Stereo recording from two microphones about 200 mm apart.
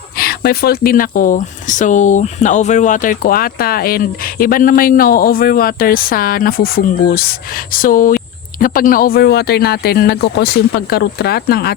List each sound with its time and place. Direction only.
0.2 s speech: 50° left (ahead or behind)